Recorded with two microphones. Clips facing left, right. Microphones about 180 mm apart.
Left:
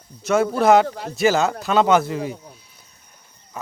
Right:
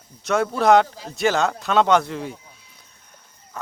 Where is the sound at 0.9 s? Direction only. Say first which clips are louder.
Left 8 dB; 65° left (ahead or behind).